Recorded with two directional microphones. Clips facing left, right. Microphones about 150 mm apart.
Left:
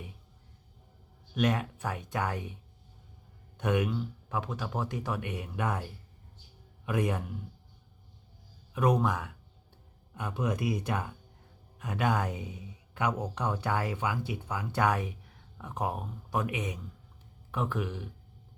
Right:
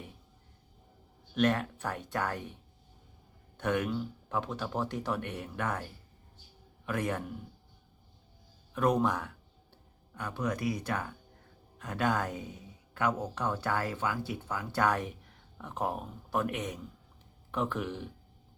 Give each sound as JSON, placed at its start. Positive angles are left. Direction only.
{"t": 1.4, "sound": "speech", "side_deg": 10}
{"t": 3.6, "sound": "speech", "side_deg": 10}
{"t": 6.8, "sound": "speech", "side_deg": 15}
{"t": 8.7, "sound": "speech", "side_deg": 10}
{"t": 10.2, "sound": "speech", "side_deg": 20}